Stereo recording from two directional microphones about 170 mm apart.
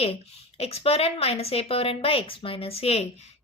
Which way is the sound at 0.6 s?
35° left (ahead or behind).